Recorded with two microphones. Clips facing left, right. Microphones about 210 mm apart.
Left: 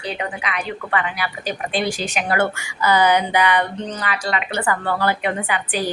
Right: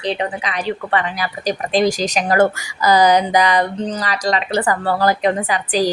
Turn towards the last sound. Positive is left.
turn(degrees=-35)  # may be behind; listen again after turning